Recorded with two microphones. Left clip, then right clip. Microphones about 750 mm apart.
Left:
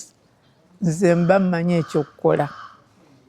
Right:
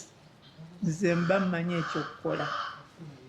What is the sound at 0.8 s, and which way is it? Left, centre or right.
Speech, left.